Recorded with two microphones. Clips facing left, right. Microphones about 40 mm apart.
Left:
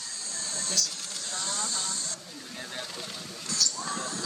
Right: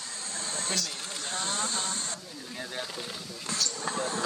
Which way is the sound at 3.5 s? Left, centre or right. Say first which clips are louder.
Even; right.